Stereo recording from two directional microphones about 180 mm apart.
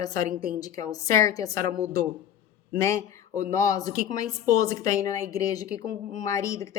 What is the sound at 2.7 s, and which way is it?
A woman's voice, 15° left (ahead or behind).